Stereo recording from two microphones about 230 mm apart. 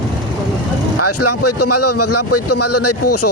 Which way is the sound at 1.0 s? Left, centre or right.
Left.